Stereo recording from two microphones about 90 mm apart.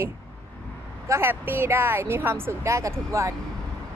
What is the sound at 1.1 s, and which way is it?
Speech, 25° right (ahead or behind).